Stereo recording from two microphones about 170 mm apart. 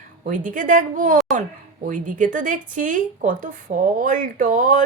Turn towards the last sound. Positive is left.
turn(degrees=-50)  # may be behind; listen again after turning